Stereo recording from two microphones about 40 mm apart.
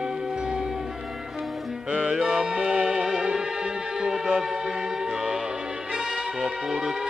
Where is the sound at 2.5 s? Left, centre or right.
Right.